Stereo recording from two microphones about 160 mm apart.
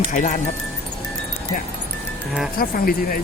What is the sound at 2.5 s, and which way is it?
Speech, 65° left (ahead or behind).